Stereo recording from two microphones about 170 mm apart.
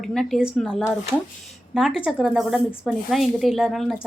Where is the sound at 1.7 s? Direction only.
5° right (ahead or behind).